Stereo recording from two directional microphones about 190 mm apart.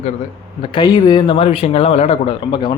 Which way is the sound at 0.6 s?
25° left (ahead or behind).